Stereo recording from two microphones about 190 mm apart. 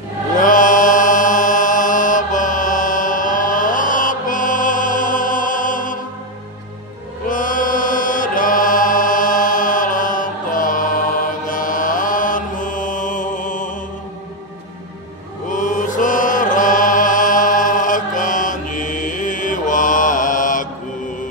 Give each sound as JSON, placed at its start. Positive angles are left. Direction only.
{"t": 0.4, "sound": "mantra", "side_deg": 45}
{"t": 7.2, "sound": "chant", "side_deg": 45}
{"t": 15.5, "sound": "chant", "side_deg": 45}